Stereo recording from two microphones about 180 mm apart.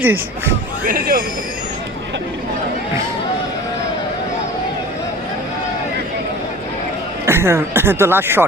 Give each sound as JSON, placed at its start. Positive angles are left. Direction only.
{"t": 0.0, "sound": "speech", "side_deg": -10}
{"t": 0.9, "sound": "speech", "side_deg": -50}
{"t": 7.3, "sound": "speech", "side_deg": -15}